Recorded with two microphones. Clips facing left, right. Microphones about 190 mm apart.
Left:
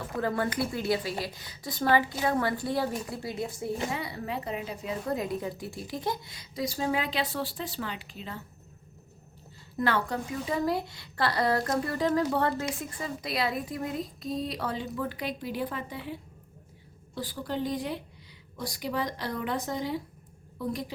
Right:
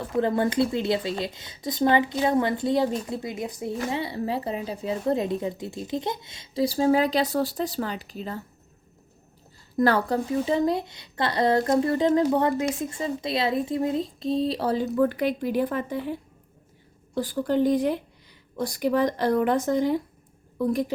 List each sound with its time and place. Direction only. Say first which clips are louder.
0.2 s a woman's voice: right 7 dB; 25° right (ahead or behind); by 8.4 s 40° right (ahead or behind)
9.7 s a woman's voice: right 7 dB; 40° right (ahead or behind)
17.2 s speech: right 9 dB; 50° right (ahead or behind)